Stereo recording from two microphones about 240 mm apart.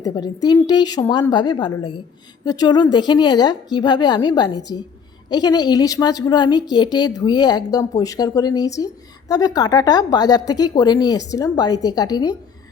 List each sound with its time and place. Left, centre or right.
0.0 s speech: centre